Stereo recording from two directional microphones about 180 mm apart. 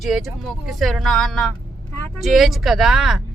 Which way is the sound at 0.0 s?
Centre (ahead or behind).